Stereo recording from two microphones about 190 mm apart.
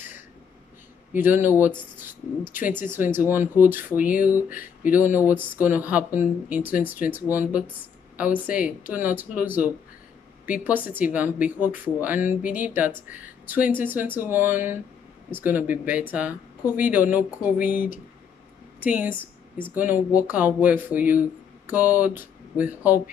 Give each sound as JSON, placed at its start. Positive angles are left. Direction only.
{"t": 1.1, "sound": "speech", "side_deg": -10}
{"t": 4.0, "sound": "speech", "side_deg": 45}
{"t": 4.6, "sound": "speech", "side_deg": -10}
{"t": 10.9, "sound": "speech", "side_deg": -10}